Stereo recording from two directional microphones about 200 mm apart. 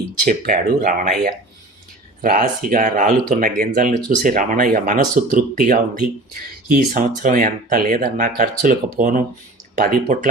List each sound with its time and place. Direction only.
0.3 s speech: 45° right (ahead or behind)
2.2 s speech: 45° right (ahead or behind)